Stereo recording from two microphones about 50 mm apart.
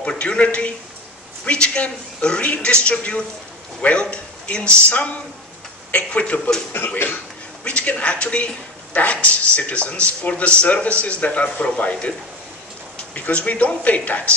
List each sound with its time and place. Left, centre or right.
0.2 s speech: left
6.7 s speech: left
7.6 s speech: left
13.1 s speech: left